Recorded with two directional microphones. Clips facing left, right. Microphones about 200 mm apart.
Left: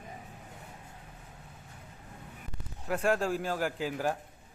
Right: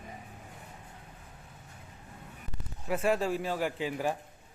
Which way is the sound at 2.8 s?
Centre (ahead or behind).